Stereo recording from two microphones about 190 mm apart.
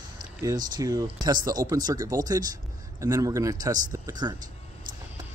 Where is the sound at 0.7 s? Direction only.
20° right (ahead or behind).